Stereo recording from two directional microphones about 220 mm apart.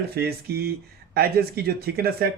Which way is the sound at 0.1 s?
45° right (ahead or behind).